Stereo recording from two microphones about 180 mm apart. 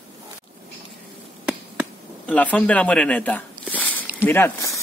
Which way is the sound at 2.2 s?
10° left (ahead or behind).